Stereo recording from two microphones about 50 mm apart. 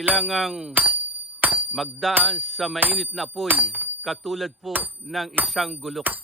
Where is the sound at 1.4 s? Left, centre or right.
Right.